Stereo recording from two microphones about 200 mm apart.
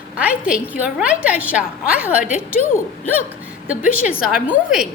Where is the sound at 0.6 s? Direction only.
5° right (ahead or behind).